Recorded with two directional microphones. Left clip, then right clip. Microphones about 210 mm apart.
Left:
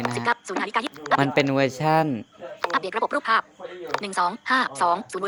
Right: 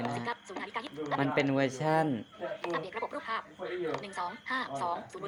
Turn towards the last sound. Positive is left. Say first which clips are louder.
# left 12 dB
turn(degrees=50)  # may be behind; listen again after turning